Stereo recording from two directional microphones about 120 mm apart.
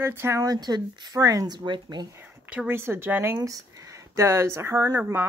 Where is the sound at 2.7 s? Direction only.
20° right (ahead or behind).